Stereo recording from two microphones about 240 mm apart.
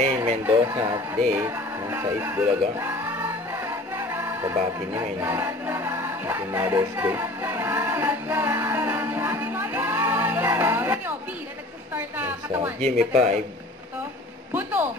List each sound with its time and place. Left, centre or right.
0.0 s speech: right
1.3 s music: centre
11.9 s a woman's voice: centre
12.8 s speech: right
14.5 s a man's voice: centre